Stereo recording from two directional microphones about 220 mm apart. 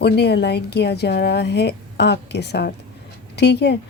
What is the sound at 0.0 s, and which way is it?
A woman's voice, 50° left (ahead or behind).